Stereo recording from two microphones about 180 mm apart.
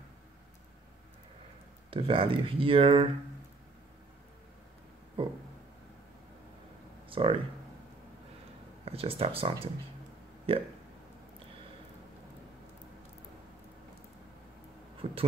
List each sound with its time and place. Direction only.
1.9 s speech: 30° right (ahead or behind)
5.2 s speech: 30° right (ahead or behind)
7.1 s speech: 30° right (ahead or behind)
8.8 s speech: 35° right (ahead or behind)
15.0 s a sound: 30° right (ahead or behind)